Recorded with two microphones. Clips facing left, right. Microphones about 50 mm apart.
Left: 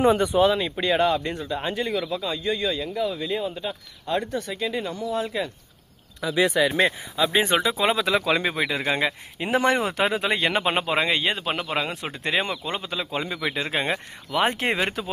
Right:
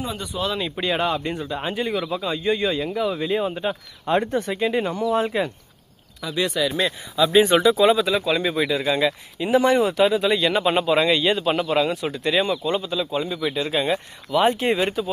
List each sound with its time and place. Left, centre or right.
0.0 s speech: left
0.5 s speech: centre; by 5.5 s right
6.3 s speech: left
7.9 s speech: left
8.4 s speech: left
11.9 s speech: left
12.8 s speech: left